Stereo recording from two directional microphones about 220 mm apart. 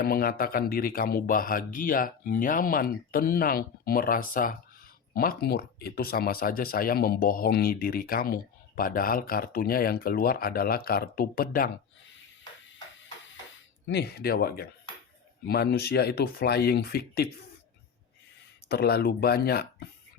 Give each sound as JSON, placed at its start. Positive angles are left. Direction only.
{"t": 0.0, "sound": "speech", "side_deg": 40}
{"t": 13.8, "sound": "speech", "side_deg": 50}
{"t": 18.7, "sound": "speech", "side_deg": 45}